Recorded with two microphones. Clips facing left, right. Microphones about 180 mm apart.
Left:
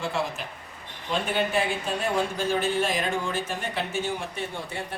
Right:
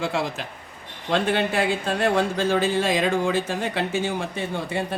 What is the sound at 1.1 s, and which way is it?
Speech, 85° right.